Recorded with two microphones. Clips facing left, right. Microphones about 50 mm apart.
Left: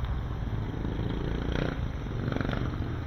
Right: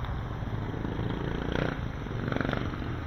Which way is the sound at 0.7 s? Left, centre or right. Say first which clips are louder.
Right 1 dB; right.